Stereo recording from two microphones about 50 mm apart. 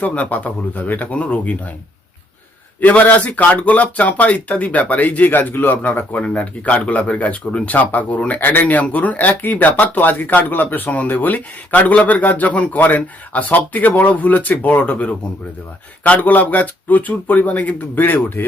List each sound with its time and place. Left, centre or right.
0.0 s speech: left
2.8 s speech: left